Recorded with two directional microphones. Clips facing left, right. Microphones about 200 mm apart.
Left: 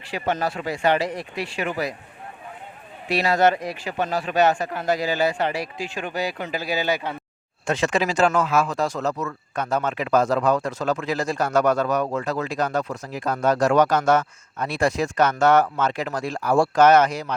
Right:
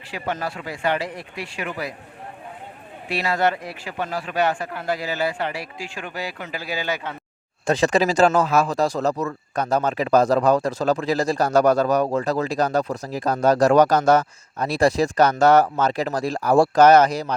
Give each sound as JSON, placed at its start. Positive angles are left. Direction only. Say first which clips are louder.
{"t": 0.1, "sound": "speech", "louder": "left 3 dB", "side_deg": 25}
{"t": 3.7, "sound": "speech", "louder": "left 3 dB", "side_deg": 20}
{"t": 7.7, "sound": "speech", "louder": "right 4 dB", "side_deg": -35}